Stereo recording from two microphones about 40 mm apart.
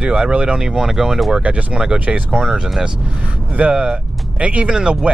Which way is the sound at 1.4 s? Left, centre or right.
Right.